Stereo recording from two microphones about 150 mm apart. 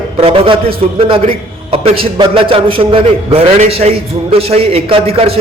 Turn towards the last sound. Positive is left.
turn(degrees=-40)  # may be behind; listen again after turning